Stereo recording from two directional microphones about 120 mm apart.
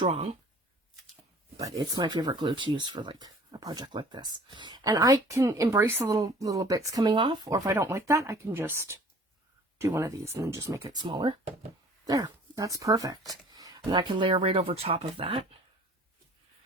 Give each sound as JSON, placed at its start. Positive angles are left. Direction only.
{"t": 0.1, "sound": "speech", "side_deg": -60}
{"t": 1.6, "sound": "speech", "side_deg": -35}
{"t": 6.1, "sound": "speech", "side_deg": -30}
{"t": 7.4, "sound": "speech", "side_deg": -30}
{"t": 12.0, "sound": "speech", "side_deg": -30}